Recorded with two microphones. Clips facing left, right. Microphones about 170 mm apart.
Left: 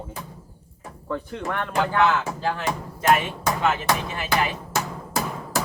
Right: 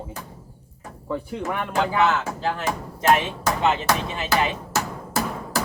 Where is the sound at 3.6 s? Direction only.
25° right (ahead or behind).